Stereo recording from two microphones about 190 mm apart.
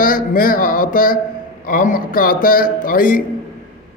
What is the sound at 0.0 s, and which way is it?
A man's voice, 45° left (ahead or behind).